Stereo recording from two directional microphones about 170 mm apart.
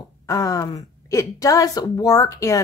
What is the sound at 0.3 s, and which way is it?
Speech, 20° left (ahead or behind).